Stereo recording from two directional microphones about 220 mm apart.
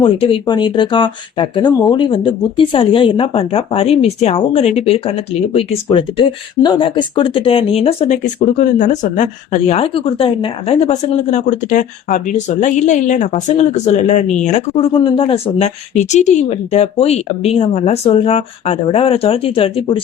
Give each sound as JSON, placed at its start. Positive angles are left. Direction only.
{"t": 0.0, "sound": "speech", "side_deg": 25}